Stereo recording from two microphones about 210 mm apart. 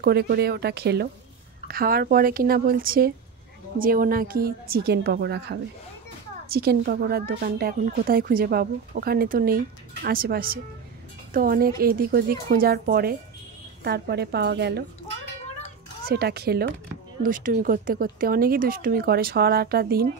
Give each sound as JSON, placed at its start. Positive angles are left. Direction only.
{"t": 0.0, "sound": "speech", "side_deg": -50}
{"t": 16.1, "sound": "speech", "side_deg": -50}